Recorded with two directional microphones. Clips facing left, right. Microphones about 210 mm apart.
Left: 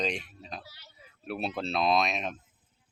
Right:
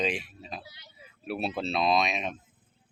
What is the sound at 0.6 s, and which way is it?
Speech, 15° right (ahead or behind).